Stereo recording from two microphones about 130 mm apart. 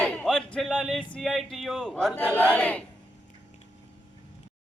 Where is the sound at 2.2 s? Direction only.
10° left (ahead or behind).